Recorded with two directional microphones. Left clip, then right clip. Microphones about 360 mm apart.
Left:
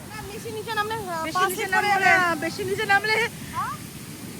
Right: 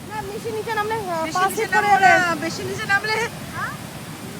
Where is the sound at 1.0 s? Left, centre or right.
Centre.